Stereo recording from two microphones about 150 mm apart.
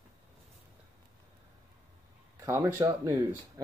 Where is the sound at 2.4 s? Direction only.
20° right (ahead or behind).